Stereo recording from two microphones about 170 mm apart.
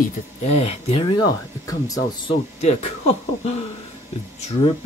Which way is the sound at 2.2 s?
40° left (ahead or behind).